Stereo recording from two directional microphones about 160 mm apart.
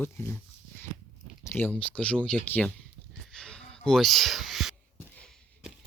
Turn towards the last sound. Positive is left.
turn(degrees=0)  # may be behind; listen again after turning